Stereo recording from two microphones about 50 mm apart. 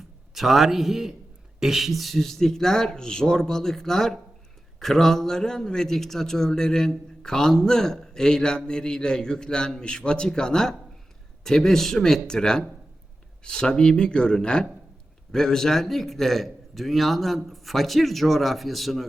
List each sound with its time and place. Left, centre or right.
0.3 s a man's voice: centre